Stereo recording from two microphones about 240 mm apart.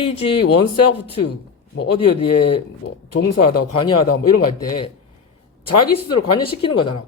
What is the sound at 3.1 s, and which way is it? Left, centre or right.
Speech, left.